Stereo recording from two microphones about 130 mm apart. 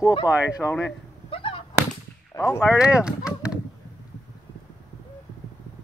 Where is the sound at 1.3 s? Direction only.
45° left (ahead or behind).